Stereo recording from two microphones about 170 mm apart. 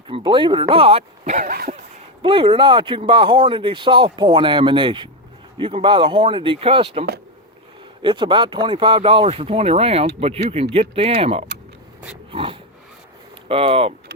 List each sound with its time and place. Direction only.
0.1 s speech: 30° right (ahead or behind)
1.5 s a sound: 60° right (ahead or behind)
2.2 s speech: 30° right (ahead or behind)
8.0 s speech: 30° right (ahead or behind)
12.3 s dog: 30° right (ahead or behind)
13.5 s speech: 35° right (ahead or behind)